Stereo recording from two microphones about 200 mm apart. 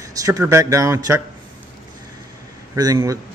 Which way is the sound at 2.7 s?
15° right (ahead or behind).